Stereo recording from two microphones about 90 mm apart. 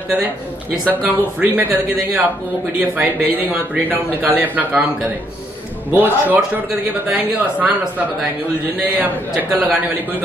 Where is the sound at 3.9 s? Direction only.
20° right (ahead or behind).